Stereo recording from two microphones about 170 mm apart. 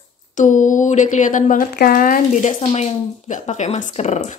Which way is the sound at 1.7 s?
60° left (ahead or behind).